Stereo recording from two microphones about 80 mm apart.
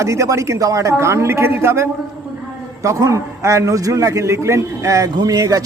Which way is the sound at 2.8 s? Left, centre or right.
Right.